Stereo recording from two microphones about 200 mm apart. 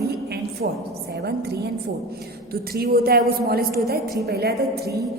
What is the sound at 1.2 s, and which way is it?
A woman's voice, 55° right (ahead or behind).